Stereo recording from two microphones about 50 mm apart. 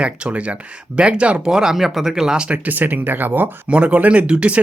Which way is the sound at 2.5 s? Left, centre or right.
Right.